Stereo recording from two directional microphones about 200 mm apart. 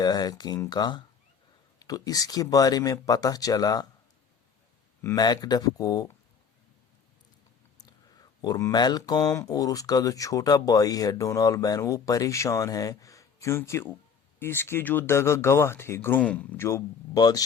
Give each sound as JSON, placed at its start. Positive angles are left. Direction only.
{"t": 0.0, "sound": "speech", "side_deg": 20}
{"t": 5.0, "sound": "speech", "side_deg": 20}
{"t": 7.8, "sound": "speech", "side_deg": 20}